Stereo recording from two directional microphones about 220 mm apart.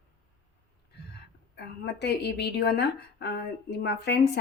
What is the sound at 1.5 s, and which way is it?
A woman's voice, 50° left (ahead or behind).